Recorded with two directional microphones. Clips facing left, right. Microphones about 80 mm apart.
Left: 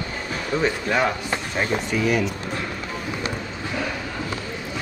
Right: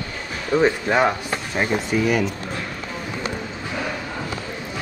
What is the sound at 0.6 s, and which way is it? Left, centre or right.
Speech, centre.